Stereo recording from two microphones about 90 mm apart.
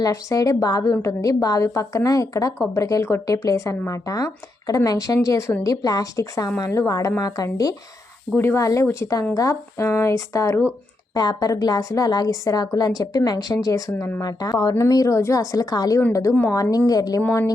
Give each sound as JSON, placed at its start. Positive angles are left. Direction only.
{"t": 0.0, "sound": "a woman's voice", "side_deg": 40}
{"t": 8.4, "sound": "a woman's voice", "side_deg": 30}
{"t": 11.1, "sound": "a woman's voice", "side_deg": 45}